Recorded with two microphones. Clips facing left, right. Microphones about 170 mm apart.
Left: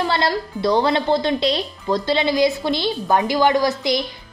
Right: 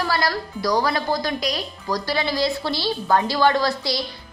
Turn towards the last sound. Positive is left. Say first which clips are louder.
# left 4 dB
turn(degrees=20)  # may be behind; listen again after turning